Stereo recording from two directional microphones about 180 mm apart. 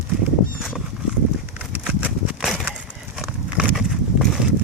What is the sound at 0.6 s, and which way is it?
Horse, centre (ahead or behind).